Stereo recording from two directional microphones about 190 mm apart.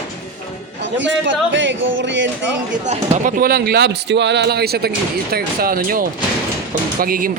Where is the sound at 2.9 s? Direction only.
45° right (ahead or behind).